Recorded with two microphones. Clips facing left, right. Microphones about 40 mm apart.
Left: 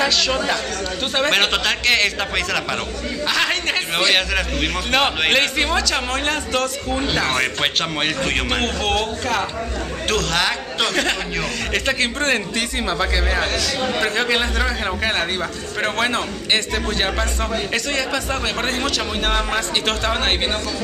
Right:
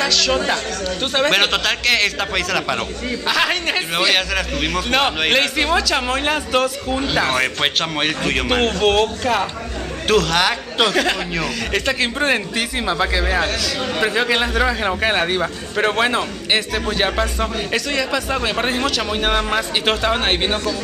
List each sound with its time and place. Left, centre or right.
0.0 s speech: centre
1.1 s a man's voice: centre